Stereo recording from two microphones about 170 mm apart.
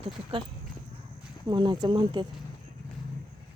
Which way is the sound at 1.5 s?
25° right (ahead or behind).